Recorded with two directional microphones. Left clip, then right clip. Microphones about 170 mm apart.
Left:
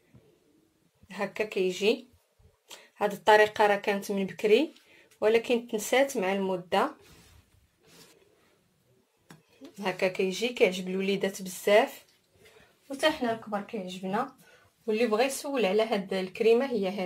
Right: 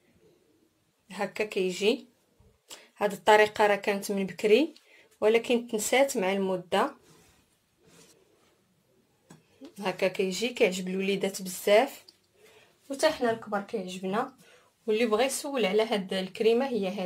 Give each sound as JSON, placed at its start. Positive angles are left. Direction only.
{"t": 1.0, "sound": "speech", "side_deg": 0}
{"t": 9.8, "sound": "speech", "side_deg": 0}